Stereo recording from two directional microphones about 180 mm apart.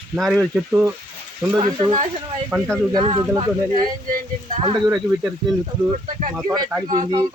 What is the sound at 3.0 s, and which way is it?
Speech, 30° right (ahead or behind).